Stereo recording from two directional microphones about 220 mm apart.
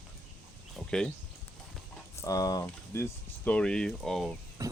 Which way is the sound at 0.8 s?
5° left (ahead or behind).